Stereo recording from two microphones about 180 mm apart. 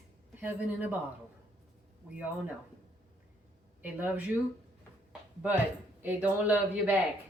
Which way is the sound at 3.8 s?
10° right (ahead or behind).